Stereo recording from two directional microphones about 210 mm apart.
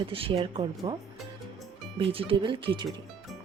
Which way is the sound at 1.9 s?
25° right (ahead or behind).